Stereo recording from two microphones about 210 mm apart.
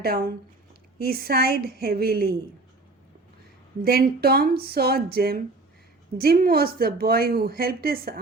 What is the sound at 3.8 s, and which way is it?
Speech, 45° right (ahead or behind).